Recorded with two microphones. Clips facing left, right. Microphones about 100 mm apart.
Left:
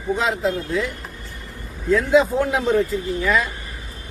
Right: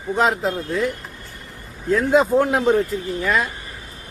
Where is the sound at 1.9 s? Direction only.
45° right (ahead or behind).